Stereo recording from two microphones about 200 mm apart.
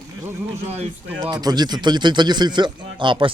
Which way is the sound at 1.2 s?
20° right (ahead or behind).